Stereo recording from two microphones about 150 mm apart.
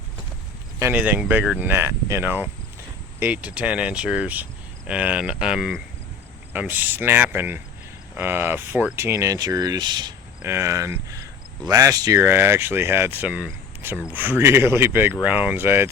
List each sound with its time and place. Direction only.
0.8 s speech: 15° right (ahead or behind)
6.5 s speech: 10° right (ahead or behind); by 10.2 s 30° right (ahead or behind)
10.4 s speech: 15° right (ahead or behind)